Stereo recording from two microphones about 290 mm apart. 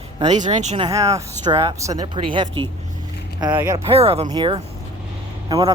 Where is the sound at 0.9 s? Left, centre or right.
Centre.